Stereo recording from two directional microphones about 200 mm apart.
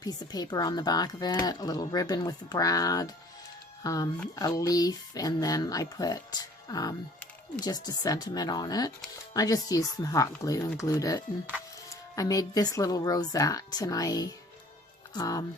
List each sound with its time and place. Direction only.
0.0 s speech: 20° left (ahead or behind)